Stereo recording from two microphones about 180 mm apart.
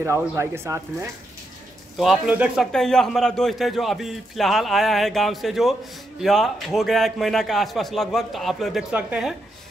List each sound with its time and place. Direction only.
0.0 s speech: 15° right (ahead or behind)
2.0 s a man's voice: 5° right (ahead or behind)